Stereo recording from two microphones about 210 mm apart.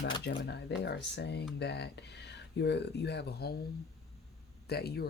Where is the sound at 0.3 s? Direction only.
50° left (ahead or behind).